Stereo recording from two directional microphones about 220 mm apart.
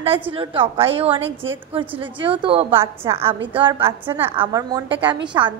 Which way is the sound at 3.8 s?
10° right (ahead or behind).